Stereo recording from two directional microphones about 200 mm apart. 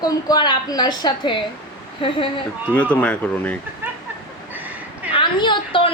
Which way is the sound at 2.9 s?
10° left (ahead or behind).